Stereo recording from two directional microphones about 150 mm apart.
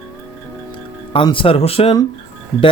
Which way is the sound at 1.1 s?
35° left (ahead or behind).